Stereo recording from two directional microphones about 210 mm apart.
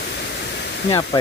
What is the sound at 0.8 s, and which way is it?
Speech, 15° left (ahead or behind).